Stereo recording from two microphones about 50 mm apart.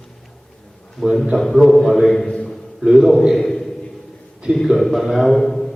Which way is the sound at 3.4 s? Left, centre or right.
Centre.